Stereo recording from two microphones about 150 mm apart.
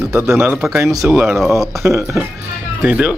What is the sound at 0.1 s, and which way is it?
Speech, 15° right (ahead or behind).